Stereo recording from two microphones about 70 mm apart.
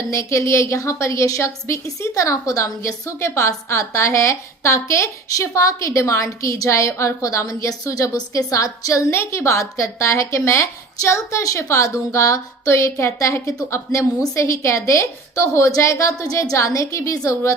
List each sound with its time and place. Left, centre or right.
0.1 s a woman's voice: left
9.0 s a woman's voice: left